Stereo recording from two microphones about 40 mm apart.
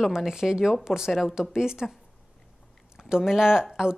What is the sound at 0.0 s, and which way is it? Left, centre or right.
A woman's voice, centre.